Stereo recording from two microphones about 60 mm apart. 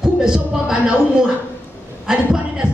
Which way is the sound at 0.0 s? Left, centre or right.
Centre.